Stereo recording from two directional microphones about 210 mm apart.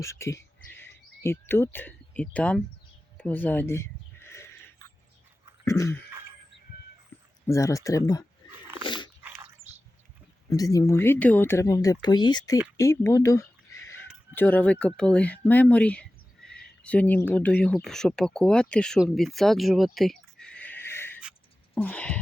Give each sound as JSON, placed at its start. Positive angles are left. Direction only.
{"t": 0.0, "sound": "speech", "side_deg": 15}
{"t": 3.2, "sound": "sheep", "side_deg": 10}
{"t": 5.6, "sound": "speech", "side_deg": 15}
{"t": 7.4, "sound": "speech", "side_deg": 15}
{"t": 8.8, "sound": "dog", "side_deg": 20}
{"t": 10.5, "sound": "speech", "side_deg": 15}
{"t": 21.8, "sound": "a sound", "side_deg": 5}